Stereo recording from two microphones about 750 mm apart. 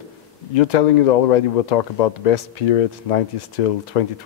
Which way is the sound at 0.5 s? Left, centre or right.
Left.